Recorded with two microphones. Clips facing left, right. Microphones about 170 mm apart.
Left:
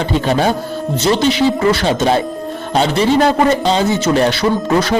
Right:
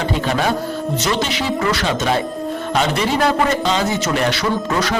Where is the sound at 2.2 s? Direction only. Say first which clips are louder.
Left 1 dB; centre (ahead or behind).